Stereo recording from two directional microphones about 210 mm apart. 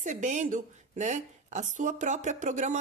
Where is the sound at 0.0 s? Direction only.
35° right (ahead or behind).